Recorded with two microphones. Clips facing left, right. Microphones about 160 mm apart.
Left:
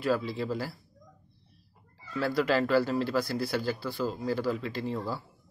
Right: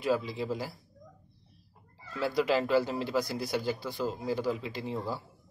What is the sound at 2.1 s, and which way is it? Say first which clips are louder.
A man's voice: left 1 dB; 15° right (ahead or behind).